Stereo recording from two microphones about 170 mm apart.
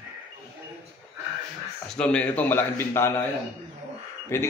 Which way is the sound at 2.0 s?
5° left (ahead or behind).